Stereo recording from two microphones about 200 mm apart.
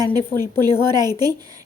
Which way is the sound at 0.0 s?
20° right (ahead or behind).